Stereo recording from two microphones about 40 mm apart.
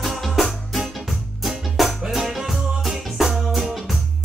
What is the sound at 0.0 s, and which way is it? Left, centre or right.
Music, centre.